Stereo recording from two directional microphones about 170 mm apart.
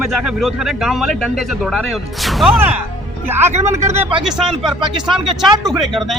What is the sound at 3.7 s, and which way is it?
Speech, 40° right (ahead or behind).